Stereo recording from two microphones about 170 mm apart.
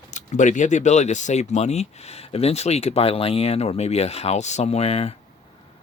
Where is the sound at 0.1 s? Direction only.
45° left (ahead or behind).